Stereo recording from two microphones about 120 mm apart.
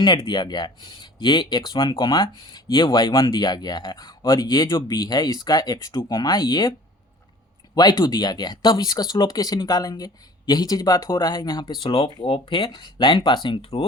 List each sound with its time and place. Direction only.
0.0 s speech: 40° left (ahead or behind)
7.8 s speech: 35° left (ahead or behind)